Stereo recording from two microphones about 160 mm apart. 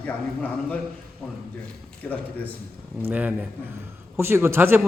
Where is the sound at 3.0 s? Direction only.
10° right (ahead or behind).